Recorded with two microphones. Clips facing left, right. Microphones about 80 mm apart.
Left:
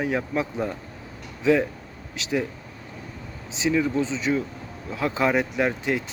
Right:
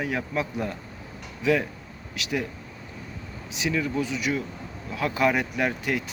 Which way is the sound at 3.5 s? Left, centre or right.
Left.